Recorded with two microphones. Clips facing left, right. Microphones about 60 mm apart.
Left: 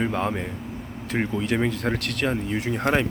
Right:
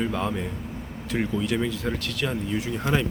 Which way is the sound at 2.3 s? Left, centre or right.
Left.